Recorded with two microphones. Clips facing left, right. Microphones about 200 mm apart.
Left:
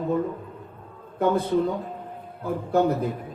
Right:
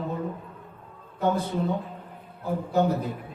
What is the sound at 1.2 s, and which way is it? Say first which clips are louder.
Speech: left 3 dB; 55° left (ahead or behind).